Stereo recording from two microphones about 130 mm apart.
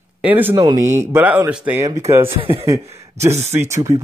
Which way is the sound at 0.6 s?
25° right (ahead or behind).